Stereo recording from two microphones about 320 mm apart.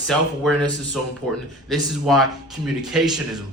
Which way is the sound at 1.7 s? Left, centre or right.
Centre.